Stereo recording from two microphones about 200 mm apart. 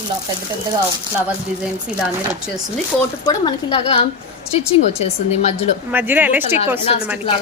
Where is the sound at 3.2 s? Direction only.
20° left (ahead or behind).